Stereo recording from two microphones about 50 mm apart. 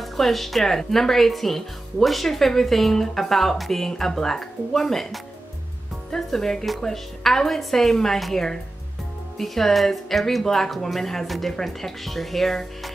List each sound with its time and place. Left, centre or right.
0.0 s a woman's voice: centre